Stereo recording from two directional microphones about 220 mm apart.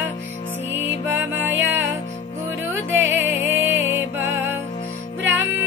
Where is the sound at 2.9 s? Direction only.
10° right (ahead or behind).